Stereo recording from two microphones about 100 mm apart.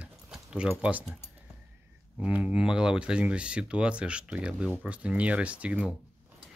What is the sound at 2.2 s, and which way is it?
Speech, 15° right (ahead or behind).